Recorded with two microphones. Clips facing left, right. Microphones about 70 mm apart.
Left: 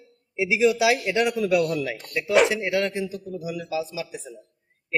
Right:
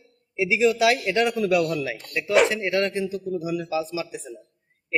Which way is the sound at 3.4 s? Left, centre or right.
Right.